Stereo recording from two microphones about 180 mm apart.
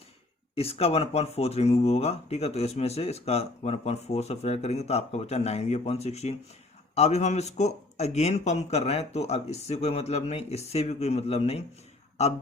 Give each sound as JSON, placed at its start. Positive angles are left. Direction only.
{"t": 0.5, "sound": "speech", "side_deg": 35}